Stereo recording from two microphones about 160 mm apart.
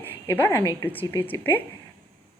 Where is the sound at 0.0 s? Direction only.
10° left (ahead or behind).